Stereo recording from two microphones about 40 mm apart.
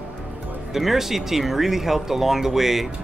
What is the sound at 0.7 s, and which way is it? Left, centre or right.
Speech, centre.